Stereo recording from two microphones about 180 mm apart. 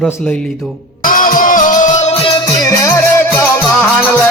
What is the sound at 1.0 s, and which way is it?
Music, 50° left (ahead or behind).